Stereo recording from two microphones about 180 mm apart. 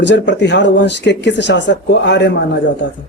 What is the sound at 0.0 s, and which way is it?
Speech, 75° left (ahead or behind).